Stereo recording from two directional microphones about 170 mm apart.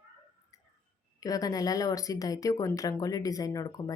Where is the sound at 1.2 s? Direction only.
20° left (ahead or behind).